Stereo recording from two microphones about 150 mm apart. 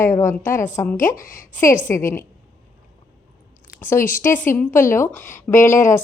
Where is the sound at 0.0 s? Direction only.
20° left (ahead or behind).